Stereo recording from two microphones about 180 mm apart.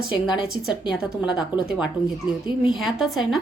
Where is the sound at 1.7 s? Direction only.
5° right (ahead or behind).